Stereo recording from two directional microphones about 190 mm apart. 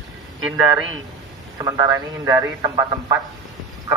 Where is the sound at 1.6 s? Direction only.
20° right (ahead or behind).